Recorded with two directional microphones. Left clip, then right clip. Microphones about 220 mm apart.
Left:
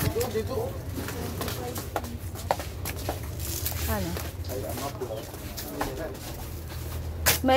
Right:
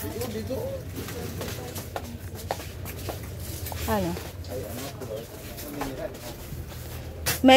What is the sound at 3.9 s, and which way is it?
Speech, 50° right (ahead or behind).